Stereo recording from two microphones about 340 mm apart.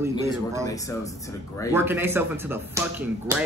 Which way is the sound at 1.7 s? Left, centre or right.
Centre.